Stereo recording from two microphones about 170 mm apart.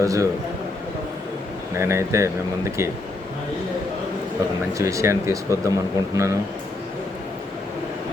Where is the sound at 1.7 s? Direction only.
15° right (ahead or behind).